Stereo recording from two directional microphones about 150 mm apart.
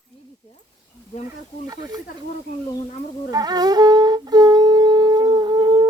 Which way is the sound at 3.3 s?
25° right (ahead or behind).